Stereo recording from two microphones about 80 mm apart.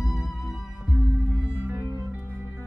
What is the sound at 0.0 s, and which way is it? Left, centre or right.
Music, centre.